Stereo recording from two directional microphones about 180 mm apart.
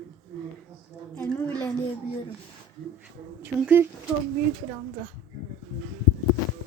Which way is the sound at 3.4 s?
10° right (ahead or behind).